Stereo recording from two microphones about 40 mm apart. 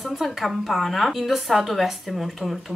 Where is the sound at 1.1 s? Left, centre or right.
Centre.